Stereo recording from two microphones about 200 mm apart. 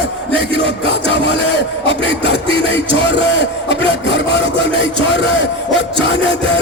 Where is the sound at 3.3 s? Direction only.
60° left (ahead or behind).